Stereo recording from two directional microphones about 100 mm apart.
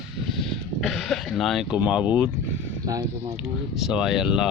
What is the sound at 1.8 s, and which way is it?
Speech, 10° right (ahead or behind).